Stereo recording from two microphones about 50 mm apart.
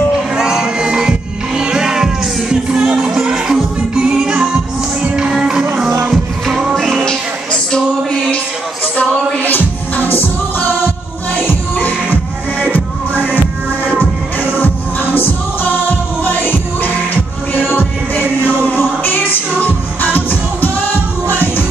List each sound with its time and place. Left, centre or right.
0.4 s music: centre
6.7 s music: centre
9.9 s music: left
13.1 s music: left
14.6 s music: left